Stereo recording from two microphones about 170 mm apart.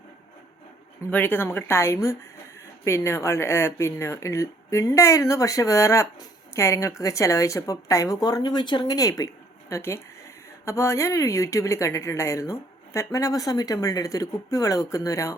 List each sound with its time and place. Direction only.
1.1 s speech: 10° left (ahead or behind)